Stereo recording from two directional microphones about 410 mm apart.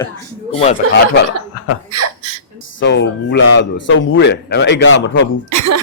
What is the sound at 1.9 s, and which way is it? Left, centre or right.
Speech, right.